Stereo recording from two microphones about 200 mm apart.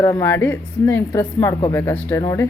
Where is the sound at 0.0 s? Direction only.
15° left (ahead or behind).